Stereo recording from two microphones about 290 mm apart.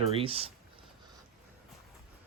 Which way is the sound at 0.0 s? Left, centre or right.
Centre.